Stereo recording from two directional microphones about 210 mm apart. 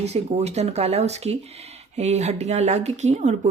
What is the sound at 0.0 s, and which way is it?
Speech, 30° right (ahead or behind).